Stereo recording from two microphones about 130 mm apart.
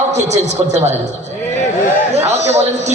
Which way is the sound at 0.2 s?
60° right (ahead or behind).